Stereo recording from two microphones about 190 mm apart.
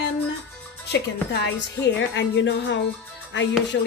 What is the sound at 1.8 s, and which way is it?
Speech, 70° left (ahead or behind).